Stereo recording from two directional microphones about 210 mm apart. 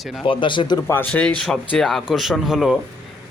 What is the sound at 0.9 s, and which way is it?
Speech, 10° left (ahead or behind).